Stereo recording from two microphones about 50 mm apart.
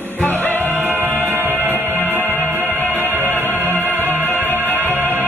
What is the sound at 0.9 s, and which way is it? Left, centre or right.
Music, left.